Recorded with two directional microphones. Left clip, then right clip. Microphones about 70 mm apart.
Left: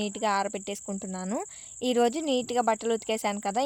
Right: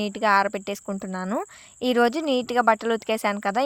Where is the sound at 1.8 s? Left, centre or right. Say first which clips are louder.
Right 4 dB; right.